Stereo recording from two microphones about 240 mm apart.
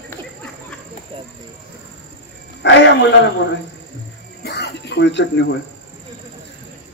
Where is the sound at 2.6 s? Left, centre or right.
Left.